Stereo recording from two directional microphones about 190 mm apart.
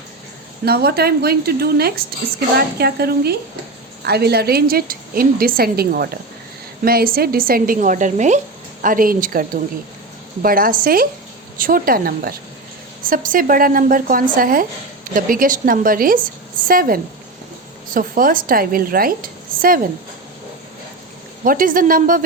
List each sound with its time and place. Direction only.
0.6 s a woman's voice: 55° right (ahead or behind)
21.4 s a woman's voice: 45° right (ahead or behind)